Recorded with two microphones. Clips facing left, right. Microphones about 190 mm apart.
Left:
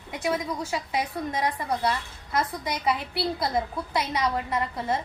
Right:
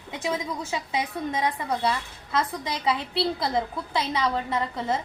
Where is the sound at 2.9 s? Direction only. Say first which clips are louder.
Right 2 dB; 25° right (ahead or behind).